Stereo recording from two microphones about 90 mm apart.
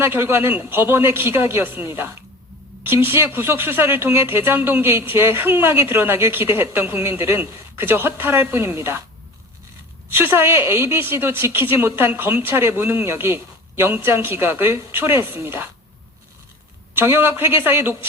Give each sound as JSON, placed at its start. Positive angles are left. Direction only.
{"t": 0.0, "sound": "speech", "side_deg": -25}
{"t": 10.2, "sound": "speech", "side_deg": -25}
{"t": 16.9, "sound": "speech", "side_deg": -25}